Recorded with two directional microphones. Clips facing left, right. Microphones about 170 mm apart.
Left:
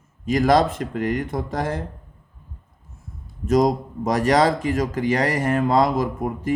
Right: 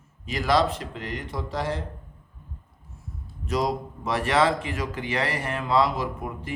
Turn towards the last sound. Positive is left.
turn(degrees=45)  # may be behind; listen again after turning